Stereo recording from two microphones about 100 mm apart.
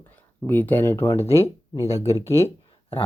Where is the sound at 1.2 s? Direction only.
90° left.